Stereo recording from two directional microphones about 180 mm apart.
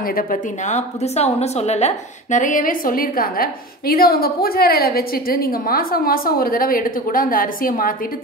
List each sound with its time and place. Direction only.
0.1 s a woman's voice: 45° left (ahead or behind)